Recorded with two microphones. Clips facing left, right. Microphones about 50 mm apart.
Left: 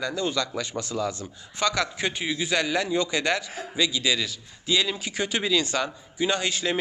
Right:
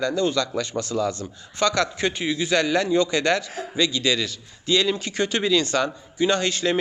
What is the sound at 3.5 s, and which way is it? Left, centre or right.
Speech, centre.